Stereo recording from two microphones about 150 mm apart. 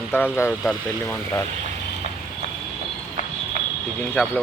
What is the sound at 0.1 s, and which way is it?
Speech, 15° left (ahead or behind).